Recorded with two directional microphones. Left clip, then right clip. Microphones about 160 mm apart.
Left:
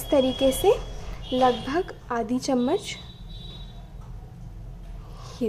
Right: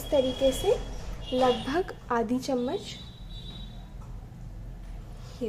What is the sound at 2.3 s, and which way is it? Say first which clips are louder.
Speech: left 4 dB; 15° left (ahead or behind).